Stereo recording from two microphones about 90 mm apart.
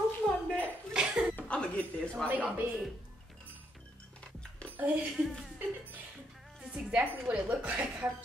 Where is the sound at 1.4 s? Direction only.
10° left (ahead or behind).